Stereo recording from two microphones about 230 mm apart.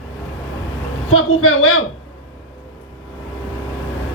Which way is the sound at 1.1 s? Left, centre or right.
Left.